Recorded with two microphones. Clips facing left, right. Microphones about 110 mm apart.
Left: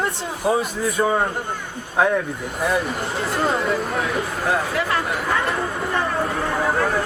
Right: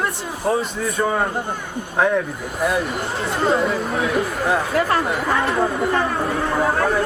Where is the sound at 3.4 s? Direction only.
Centre (ahead or behind).